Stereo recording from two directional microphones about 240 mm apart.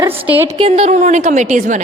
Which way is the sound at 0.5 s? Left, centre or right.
Right.